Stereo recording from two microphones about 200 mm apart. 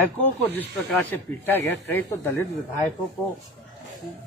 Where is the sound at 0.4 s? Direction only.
10° left (ahead or behind).